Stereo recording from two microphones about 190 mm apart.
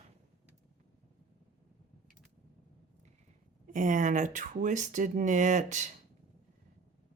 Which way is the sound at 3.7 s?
40° right (ahead or behind).